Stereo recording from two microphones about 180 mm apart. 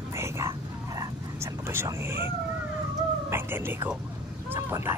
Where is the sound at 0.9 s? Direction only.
15° right (ahead or behind).